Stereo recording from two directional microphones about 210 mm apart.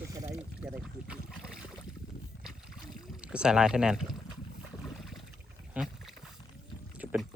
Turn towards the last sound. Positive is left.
turn(degrees=-5)  # may be behind; listen again after turning